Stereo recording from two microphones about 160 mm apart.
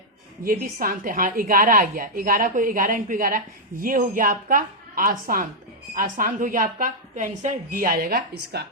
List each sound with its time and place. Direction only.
0.4 s a woman's voice: 60° right (ahead or behind); by 8.6 s 80° right